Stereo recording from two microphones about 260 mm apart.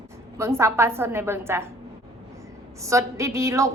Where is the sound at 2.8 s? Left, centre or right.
Centre.